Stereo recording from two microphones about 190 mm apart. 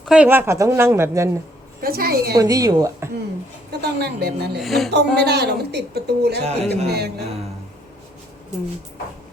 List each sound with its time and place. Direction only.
0.0 s a woman's voice: 5° right (ahead or behind)
1.8 s a woman's voice: 50° right (ahead or behind)
2.3 s speech: 20° right (ahead or behind)
3.7 s a woman's voice: 60° right (ahead or behind)
4.5 s a sound: centre (ahead or behind)
5.1 s a woman's voice: 60° right (ahead or behind)
6.4 s speech: 35° right (ahead or behind)
6.8 s a woman's voice: 60° right (ahead or behind)